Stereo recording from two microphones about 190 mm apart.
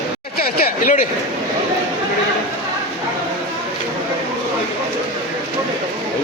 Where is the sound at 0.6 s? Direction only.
45° left (ahead or behind).